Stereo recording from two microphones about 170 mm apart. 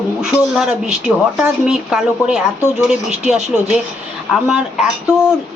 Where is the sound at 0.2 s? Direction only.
5° right (ahead or behind).